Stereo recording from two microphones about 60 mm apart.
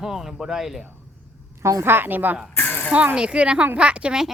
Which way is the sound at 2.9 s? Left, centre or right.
Centre.